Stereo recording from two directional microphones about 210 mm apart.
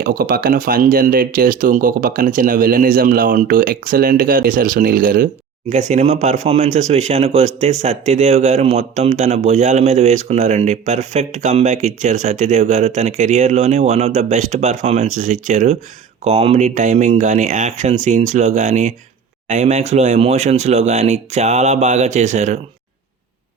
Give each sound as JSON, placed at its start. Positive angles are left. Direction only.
{"t": 0.0, "sound": "speech", "side_deg": -45}